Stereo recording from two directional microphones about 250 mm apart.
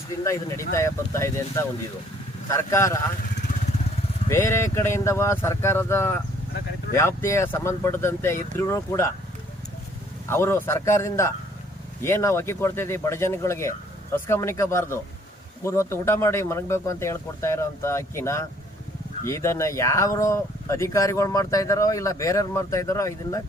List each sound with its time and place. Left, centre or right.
0.7 s speech: centre
4.3 s speech: centre
10.2 s speech: centre